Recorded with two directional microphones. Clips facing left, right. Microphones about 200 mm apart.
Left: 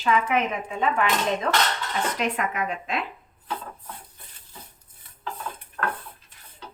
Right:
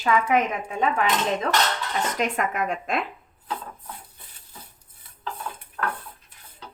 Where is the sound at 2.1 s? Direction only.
45° right (ahead or behind).